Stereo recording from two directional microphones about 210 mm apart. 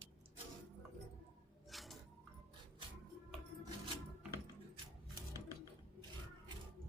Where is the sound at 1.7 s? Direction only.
Centre (ahead or behind).